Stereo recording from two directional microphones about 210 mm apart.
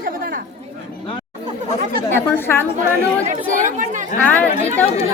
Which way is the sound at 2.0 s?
10° left (ahead or behind).